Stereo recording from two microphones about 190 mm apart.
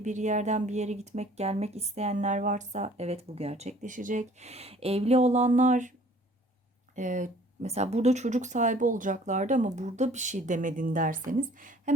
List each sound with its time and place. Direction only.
0.0 s speech: 40° right (ahead or behind)
6.9 s a woman's voice: 40° right (ahead or behind)